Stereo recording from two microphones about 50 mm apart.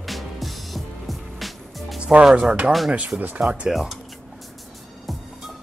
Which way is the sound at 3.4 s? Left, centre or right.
Right.